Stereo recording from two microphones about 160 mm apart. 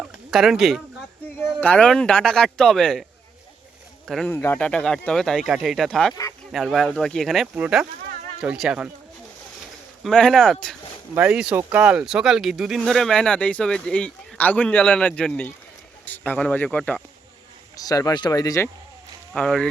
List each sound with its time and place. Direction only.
0.0 s a sound: centre (ahead or behind)
1.4 s speech: 10° left (ahead or behind)
4.3 s speech: 15° left (ahead or behind); by 8.9 s 5° right (ahead or behind)
10.0 s speech: 5° left (ahead or behind)
11.1 s speech: 10° right (ahead or behind); by 17.0 s 10° left (ahead or behind)
17.8 s speech: 25° left (ahead or behind)
19.3 s speech: 5° left (ahead or behind)